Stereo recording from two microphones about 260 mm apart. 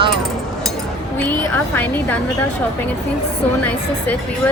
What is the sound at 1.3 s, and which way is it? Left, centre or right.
Speech, centre.